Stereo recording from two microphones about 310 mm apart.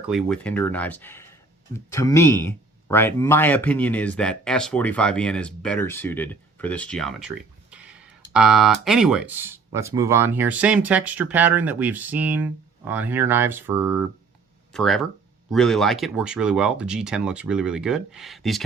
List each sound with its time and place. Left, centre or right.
0.0 s speech: centre